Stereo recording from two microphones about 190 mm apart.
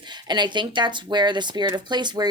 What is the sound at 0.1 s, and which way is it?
Speech, 25° right (ahead or behind).